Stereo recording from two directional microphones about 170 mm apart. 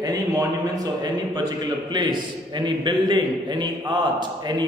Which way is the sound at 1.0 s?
25° right (ahead or behind).